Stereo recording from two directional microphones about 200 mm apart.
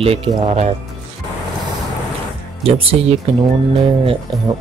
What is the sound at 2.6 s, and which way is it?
Speech, 30° right (ahead or behind).